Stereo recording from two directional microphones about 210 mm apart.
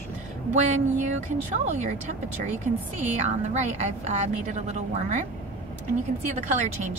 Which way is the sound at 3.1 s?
35° right (ahead or behind).